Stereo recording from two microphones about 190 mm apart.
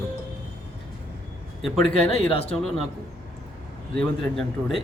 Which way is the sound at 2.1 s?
30° left (ahead or behind).